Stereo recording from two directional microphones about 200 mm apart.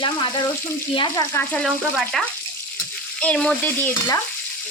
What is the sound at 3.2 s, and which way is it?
Stir, 5° left (ahead or behind).